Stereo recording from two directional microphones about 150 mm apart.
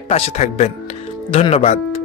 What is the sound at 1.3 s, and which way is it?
Speech, 40° left (ahead or behind).